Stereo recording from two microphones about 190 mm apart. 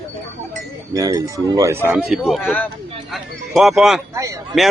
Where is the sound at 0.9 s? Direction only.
15° right (ahead or behind).